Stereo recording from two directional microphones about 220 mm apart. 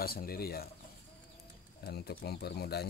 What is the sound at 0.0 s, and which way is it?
Speech, 45° left (ahead or behind).